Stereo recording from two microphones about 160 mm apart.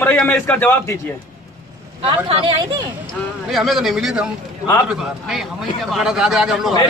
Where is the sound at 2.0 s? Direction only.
35° right (ahead or behind).